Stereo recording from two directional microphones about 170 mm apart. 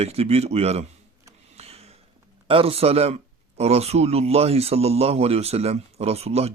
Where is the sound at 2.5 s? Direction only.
35° right (ahead or behind).